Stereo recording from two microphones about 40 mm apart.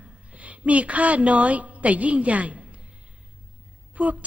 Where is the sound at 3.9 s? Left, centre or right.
Right.